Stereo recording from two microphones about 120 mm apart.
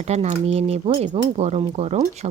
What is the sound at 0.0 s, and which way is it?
A woman's voice, 70° right (ahead or behind).